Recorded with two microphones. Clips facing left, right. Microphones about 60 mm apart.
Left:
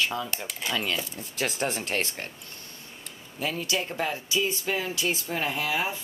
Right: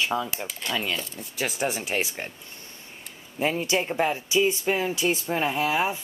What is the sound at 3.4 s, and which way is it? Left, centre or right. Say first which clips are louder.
Speech: right 5 dB; right.